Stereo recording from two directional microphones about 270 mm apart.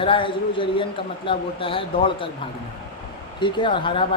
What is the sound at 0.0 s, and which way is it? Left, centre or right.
A man's voice, centre.